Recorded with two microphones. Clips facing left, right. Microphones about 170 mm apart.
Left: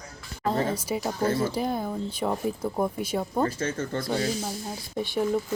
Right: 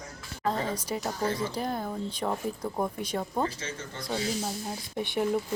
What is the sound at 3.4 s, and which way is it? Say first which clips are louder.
Speech: left 6 dB; 55° left (ahead or behind).